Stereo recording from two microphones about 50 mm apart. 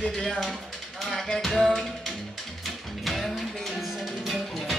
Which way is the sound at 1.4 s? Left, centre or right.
Centre.